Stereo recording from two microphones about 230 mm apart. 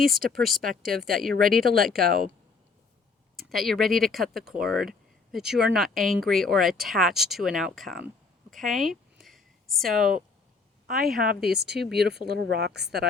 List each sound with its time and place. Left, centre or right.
0.2 s speech: right
3.3 s speech: centre
10.0 s speech: right